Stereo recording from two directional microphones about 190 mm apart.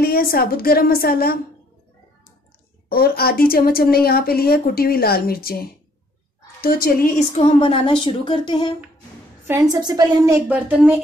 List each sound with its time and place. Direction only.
0.0 s speech: 55° left (ahead or behind)
2.9 s speech: 55° left (ahead or behind)
7.3 s speech: 30° left (ahead or behind)
9.5 s a woman's voice: 20° right (ahead or behind)